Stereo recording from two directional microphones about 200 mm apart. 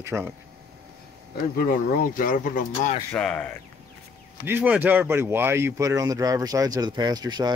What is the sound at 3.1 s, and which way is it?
Speech, 5° left (ahead or behind).